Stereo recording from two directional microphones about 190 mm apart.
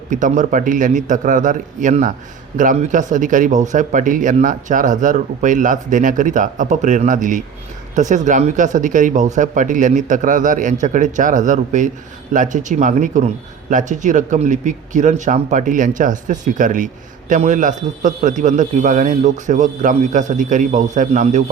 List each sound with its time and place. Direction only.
0.1 s a man's voice: 40° right (ahead or behind)